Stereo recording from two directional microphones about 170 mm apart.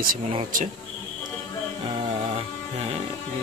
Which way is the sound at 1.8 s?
35° right (ahead or behind).